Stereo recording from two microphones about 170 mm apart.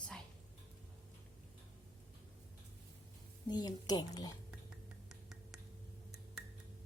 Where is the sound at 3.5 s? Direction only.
25° left (ahead or behind).